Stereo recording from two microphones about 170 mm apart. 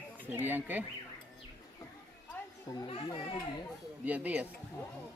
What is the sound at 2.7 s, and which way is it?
Speech, 25° left (ahead or behind).